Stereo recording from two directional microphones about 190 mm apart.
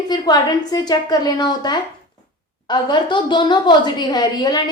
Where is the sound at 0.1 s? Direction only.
20° left (ahead or behind).